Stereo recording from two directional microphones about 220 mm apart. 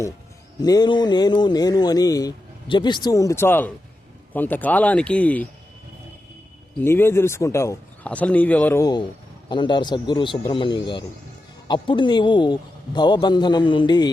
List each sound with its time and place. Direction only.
0.6 s speech: 20° left (ahead or behind)
6.8 s a man's voice: 10° left (ahead or behind)